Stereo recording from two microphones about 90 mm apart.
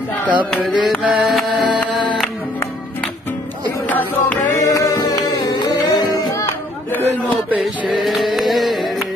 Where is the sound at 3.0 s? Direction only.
20° left (ahead or behind).